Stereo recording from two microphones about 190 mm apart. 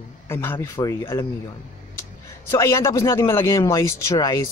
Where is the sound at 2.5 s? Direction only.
15° left (ahead or behind).